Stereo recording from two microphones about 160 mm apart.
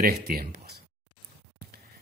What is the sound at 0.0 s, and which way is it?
Speech, 65° right (ahead or behind).